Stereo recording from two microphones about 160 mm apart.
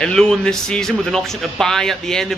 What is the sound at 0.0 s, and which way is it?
Speech, 5° left (ahead or behind).